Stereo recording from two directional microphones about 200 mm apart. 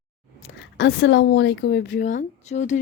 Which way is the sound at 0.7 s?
60° left (ahead or behind).